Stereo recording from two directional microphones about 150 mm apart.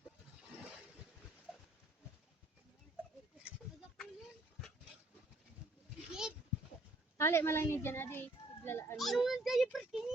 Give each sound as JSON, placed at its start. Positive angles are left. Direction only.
{"t": 6.1, "sound": "goat", "side_deg": -5}
{"t": 7.2, "sound": "a child's voice", "side_deg": 15}
{"t": 9.0, "sound": "a child's voice", "side_deg": 0}